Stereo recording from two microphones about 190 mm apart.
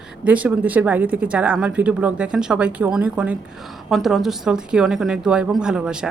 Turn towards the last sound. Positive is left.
turn(degrees=-5)  # may be behind; listen again after turning